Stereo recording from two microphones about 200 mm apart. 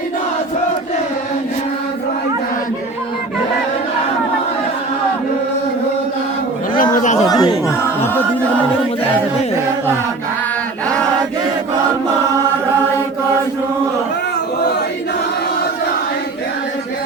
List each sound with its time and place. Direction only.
7.3 s chatter: 20° left (ahead or behind)